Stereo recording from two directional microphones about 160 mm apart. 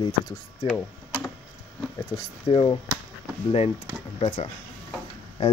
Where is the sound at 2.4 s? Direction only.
35° left (ahead or behind).